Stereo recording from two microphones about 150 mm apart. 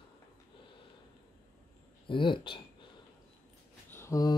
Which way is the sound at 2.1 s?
35° left (ahead or behind).